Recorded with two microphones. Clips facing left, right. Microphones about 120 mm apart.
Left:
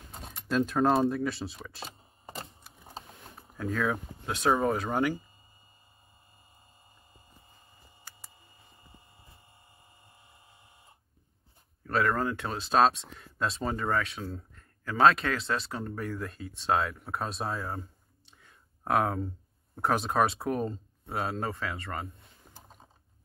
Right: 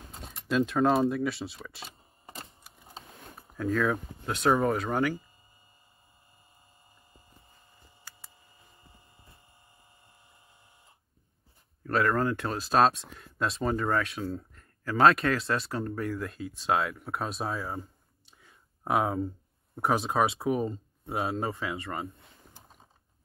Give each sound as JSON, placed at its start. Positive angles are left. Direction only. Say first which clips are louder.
{"t": 0.2, "sound": "speech", "louder": "right 1 dB", "side_deg": 0}
{"t": 3.5, "sound": "speech", "louder": "right 3 dB", "side_deg": 0}
{"t": 11.8, "sound": "speech", "louder": "right 2 dB", "side_deg": 0}